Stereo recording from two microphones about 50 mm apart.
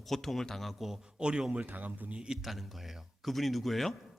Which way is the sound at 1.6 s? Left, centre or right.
Right.